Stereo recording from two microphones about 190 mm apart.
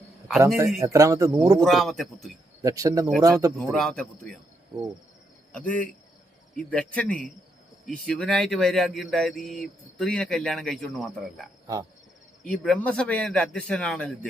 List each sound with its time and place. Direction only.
0.4 s speech: 15° right (ahead or behind)
1.6 s speech: centre (ahead or behind)
2.6 s speech: 20° right (ahead or behind)
3.7 s speech: centre (ahead or behind)
5.5 s speech: 5° left (ahead or behind)
12.5 s speech: 5° left (ahead or behind)